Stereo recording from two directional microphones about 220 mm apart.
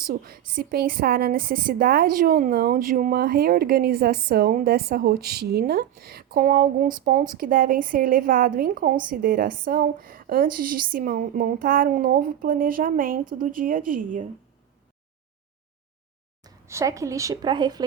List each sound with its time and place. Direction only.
0.1 s a woman's voice: 40° right (ahead or behind)
16.4 s a woman's voice: 15° right (ahead or behind)